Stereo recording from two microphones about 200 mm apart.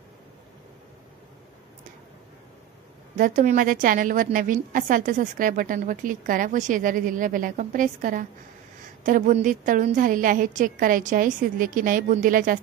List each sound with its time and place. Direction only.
3.2 s a woman's voice: 40° right (ahead or behind)